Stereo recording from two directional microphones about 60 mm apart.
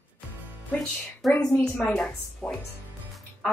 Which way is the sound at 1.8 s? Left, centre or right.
Left.